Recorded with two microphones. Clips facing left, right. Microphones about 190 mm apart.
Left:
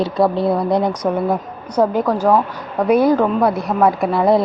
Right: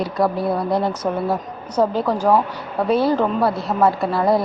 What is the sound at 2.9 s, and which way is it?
A woman's voice, 15° left (ahead or behind).